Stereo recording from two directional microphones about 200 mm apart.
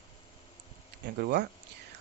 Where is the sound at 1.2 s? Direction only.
55° right (ahead or behind).